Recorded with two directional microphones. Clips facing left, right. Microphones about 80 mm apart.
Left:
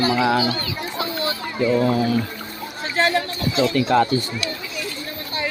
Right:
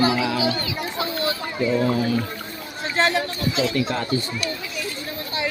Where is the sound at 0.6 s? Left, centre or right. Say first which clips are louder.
Even; centre.